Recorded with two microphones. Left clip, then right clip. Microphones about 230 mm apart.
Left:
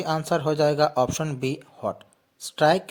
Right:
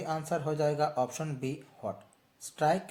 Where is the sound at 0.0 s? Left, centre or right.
Left.